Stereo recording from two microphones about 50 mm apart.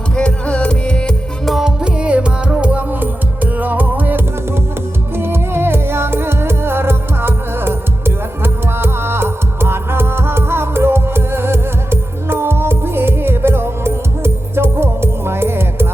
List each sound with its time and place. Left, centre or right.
0.2 s music: left
1.6 s music: right
5.1 s music: right